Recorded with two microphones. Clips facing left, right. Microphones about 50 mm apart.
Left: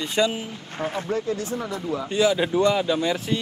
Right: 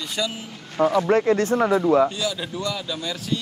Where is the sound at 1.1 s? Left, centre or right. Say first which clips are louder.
Right 8 dB; right.